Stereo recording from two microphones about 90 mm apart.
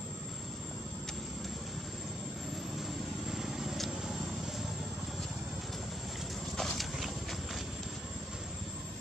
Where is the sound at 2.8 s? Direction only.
5° right (ahead or behind).